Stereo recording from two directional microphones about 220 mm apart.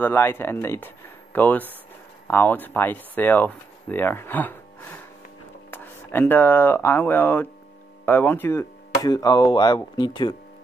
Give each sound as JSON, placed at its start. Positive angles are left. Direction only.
{"t": 0.0, "sound": "speech", "side_deg": 10}